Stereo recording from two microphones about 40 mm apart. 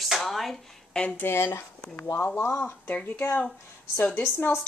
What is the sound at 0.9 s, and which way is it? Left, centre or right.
Speech, left.